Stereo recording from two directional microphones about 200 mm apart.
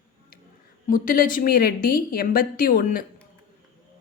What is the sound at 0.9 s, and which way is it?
A woman's voice, 45° left (ahead or behind).